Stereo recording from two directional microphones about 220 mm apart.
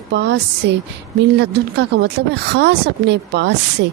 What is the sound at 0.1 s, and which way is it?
A woman's voice, 50° right (ahead or behind).